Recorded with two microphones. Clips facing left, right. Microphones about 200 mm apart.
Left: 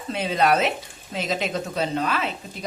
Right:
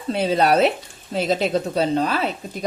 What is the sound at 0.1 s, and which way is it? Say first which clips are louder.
A woman's voice: right 3 dB; 35° right (ahead or behind).